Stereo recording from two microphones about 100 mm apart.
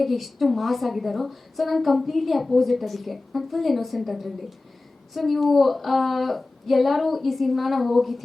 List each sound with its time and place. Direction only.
0.0 s a woman's voice: centre (ahead or behind)